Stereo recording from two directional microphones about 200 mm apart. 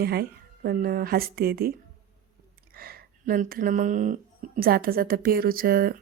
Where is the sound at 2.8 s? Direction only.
50° right (ahead or behind).